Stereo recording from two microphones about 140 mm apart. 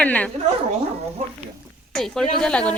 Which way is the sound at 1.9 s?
5° left (ahead or behind).